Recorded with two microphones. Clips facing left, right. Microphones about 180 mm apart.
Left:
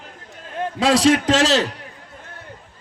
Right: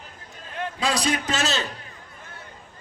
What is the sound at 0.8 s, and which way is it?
Speech, 90° left.